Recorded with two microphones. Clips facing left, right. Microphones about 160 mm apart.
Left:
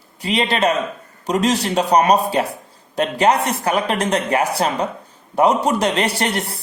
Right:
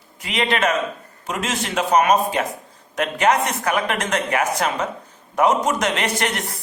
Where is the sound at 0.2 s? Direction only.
35° left (ahead or behind).